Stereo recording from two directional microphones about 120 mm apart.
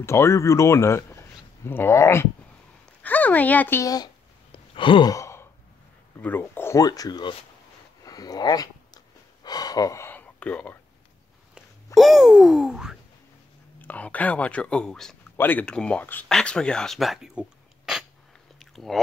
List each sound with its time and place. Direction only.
0.0 s speech: 20° left (ahead or behind)
3.8 s speech: 30° left (ahead or behind)
4.5 s gasp: 45° left (ahead or behind)
5.1 s sigh: 25° left (ahead or behind)
6.2 s speech: 15° left (ahead or behind); by 7.3 s 35° left (ahead or behind)
8.0 s a sound: 30° left (ahead or behind); by 10.8 s 10° left (ahead or behind)
11.5 s a sound: centre (ahead or behind)
13.7 s speech: 15° left (ahead or behind); by 18.0 s 5° right (ahead or behind)
18.6 s chewing: centre (ahead or behind)